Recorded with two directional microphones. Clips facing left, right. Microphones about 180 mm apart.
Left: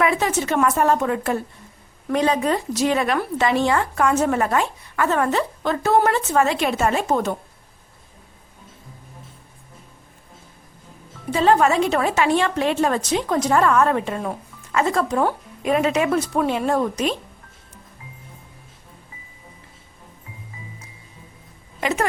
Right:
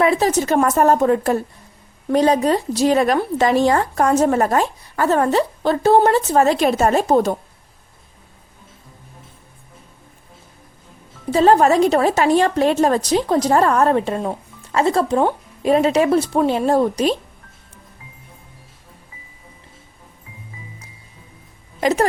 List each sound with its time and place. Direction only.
0.0 s speech: 35° right (ahead or behind)
11.3 s speech: 35° right (ahead or behind)
21.8 s a sound: 40° right (ahead or behind)